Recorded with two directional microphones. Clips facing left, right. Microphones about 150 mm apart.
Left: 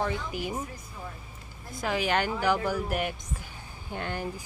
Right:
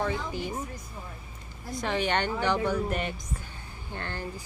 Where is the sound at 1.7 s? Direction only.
5° left (ahead or behind).